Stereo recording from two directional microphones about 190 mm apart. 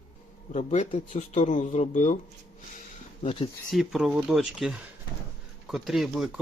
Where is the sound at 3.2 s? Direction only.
25° left (ahead or behind).